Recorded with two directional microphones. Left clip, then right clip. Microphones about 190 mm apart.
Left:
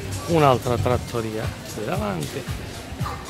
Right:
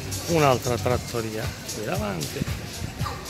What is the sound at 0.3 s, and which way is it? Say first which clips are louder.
Speech: left 3 dB; 10° left (ahead or behind).